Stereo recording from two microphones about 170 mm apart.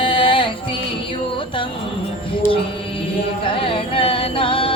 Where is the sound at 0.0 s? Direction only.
30° left (ahead or behind).